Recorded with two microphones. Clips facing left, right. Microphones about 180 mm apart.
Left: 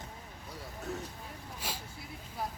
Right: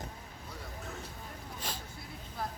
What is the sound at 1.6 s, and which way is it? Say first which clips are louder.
Vehicle: left 1 dB; 10° left (ahead or behind).